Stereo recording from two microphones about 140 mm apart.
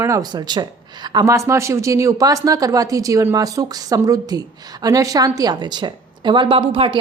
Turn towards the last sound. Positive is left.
turn(degrees=-40)  # may be behind; listen again after turning